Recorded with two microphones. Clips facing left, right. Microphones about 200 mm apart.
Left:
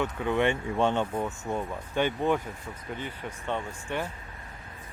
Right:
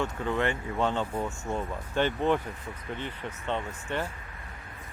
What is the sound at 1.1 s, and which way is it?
Speech, 10° left (ahead or behind).